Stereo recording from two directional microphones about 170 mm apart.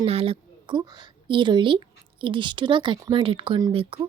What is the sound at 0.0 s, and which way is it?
A woman's voice, 35° right (ahead or behind).